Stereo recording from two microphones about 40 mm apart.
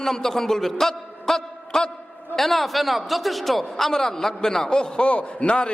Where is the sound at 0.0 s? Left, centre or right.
Centre.